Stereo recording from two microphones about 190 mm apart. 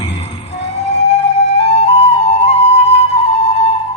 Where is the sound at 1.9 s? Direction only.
35° left (ahead or behind).